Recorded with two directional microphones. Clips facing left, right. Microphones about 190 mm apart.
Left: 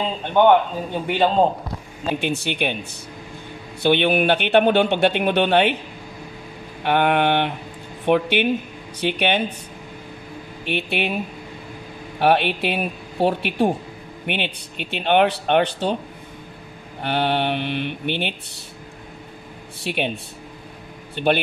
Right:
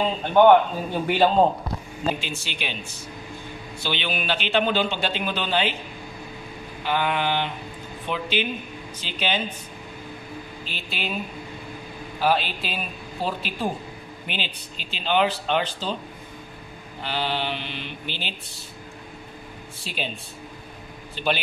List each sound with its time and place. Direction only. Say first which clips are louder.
0.4 s a man's voice: even; 5° right (ahead or behind)
2.1 s speech: left 10 dB; 60° left (ahead or behind)
3.8 s speech: left 11 dB; 60° left (ahead or behind)
6.8 s speech: left 6 dB; 65° left (ahead or behind)
10.6 s speech: left 12 dB; 65° left (ahead or behind)
12.2 s speech: left 5 dB; 65° left (ahead or behind)
17.0 s speech: left 6 dB; 60° left (ahead or behind)
19.8 s speech: left 8 dB; 65° left (ahead or behind)
21.1 s a man's voice: left 6 dB; 55° left (ahead or behind)